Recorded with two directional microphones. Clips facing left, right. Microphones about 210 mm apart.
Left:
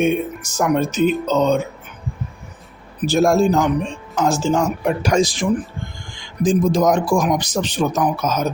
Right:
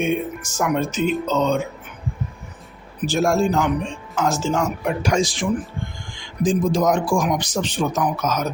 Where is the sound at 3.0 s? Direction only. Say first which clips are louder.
Left 4 dB; 35° left (ahead or behind).